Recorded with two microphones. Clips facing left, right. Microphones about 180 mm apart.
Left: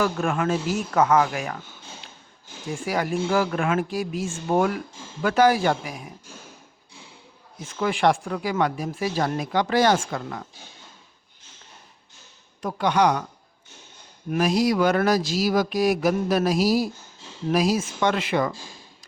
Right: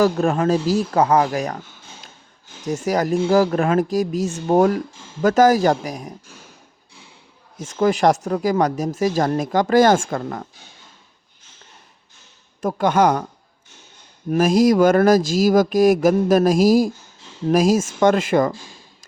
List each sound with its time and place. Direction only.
0.0 s speech: 35° right (ahead or behind)
2.6 s speech: 40° right (ahead or behind)
7.6 s speech: 40° right (ahead or behind)
12.6 s speech: 45° right (ahead or behind)
14.3 s speech: 45° right (ahead or behind)